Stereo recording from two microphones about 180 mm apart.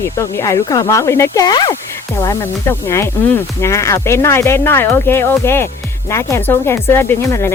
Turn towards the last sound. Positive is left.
turn(degrees=15)  # may be behind; listen again after turning